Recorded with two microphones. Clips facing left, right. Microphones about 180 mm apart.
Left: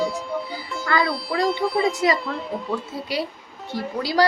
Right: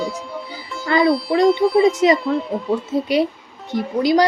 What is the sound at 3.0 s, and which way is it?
Speech, 20° right (ahead or behind).